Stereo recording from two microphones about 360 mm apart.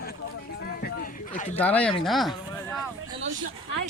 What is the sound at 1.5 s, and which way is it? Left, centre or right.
A man's voice, centre.